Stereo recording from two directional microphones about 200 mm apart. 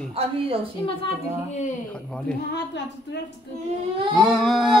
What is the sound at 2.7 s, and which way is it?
Speech, 60° left (ahead or behind).